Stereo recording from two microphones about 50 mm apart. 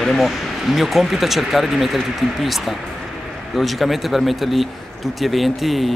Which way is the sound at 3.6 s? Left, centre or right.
Centre.